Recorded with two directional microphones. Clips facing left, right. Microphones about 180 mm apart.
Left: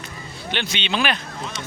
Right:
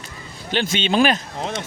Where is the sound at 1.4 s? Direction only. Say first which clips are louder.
Right 5 dB; 75° right (ahead or behind).